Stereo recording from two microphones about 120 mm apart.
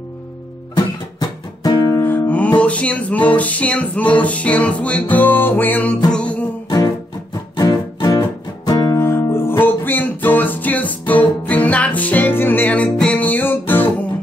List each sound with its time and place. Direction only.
0.7 s music: 35° left (ahead or behind); by 6.4 s 10° left (ahead or behind)
7.5 s music: 30° left (ahead or behind); by 13.9 s 15° left (ahead or behind)